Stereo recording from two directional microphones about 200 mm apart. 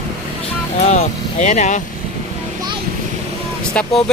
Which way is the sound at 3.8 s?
5° left (ahead or behind).